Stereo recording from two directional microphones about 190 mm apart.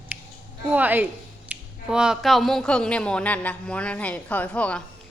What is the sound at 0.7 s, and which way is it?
A woman's voice, 10° right (ahead or behind).